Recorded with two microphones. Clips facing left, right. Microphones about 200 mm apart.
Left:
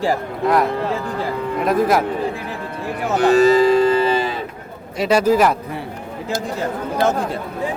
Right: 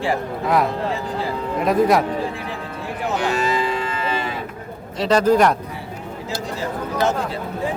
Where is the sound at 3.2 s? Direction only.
40° left (ahead or behind).